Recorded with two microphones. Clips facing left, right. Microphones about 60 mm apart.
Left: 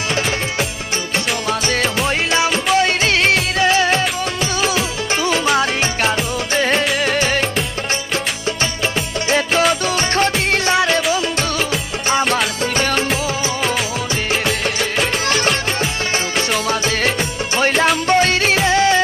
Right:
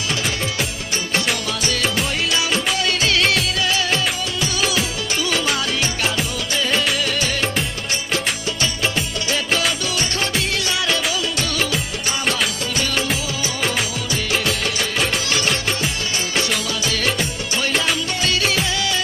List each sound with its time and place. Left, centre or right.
1.5 s music: left
2.7 s music of bollywood: left
5.2 s music: left
6.5 s music of bollywood: left
7.0 s music: left
9.3 s music: left
15.3 s music: left